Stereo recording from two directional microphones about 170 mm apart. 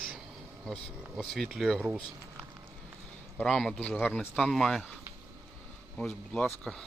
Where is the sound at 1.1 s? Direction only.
5° left (ahead or behind).